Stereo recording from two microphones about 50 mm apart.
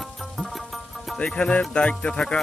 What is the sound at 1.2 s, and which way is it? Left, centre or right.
Speech, left.